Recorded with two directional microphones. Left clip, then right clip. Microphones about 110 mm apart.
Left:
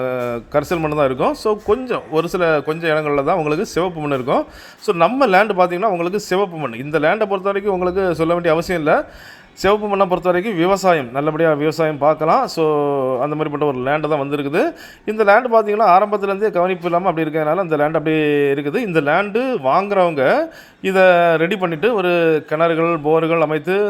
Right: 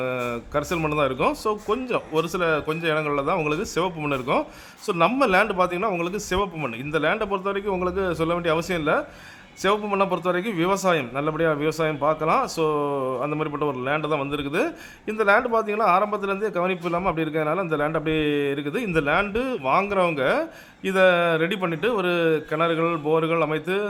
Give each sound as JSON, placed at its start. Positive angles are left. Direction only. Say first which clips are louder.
{"t": 0.0, "sound": "a man's voice", "louder": "left 6 dB", "side_deg": 25}